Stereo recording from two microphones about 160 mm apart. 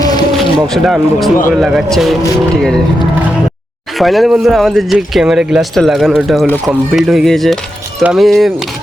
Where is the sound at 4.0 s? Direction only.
Centre (ahead or behind).